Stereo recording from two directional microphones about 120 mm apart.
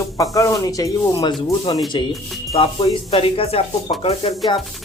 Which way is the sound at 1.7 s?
45° left (ahead or behind).